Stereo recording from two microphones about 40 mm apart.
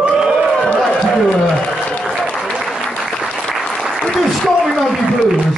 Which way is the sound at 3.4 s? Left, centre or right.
Centre.